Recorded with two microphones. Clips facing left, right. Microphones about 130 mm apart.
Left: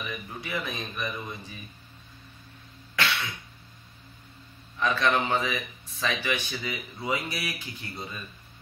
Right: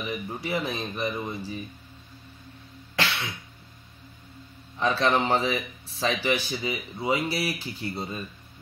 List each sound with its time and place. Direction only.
0.0 s speech: 30° right (ahead or behind)
4.7 s speech: 30° right (ahead or behind)